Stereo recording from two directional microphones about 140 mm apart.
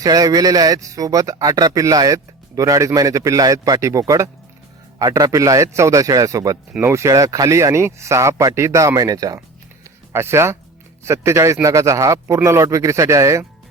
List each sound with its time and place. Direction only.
0.0 s speech: 25° right (ahead or behind)